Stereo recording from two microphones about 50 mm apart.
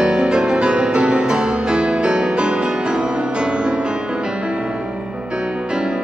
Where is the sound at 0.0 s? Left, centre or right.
Centre.